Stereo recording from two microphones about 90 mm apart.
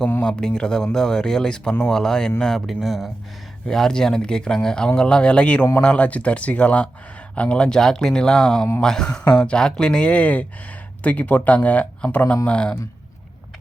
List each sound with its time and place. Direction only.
0.2 s speech: 10° left (ahead or behind)